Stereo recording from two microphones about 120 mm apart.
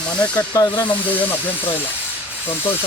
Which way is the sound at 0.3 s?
30° left (ahead or behind).